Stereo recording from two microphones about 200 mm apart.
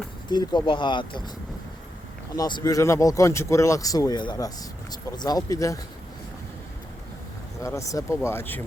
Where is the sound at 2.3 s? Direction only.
20° left (ahead or behind).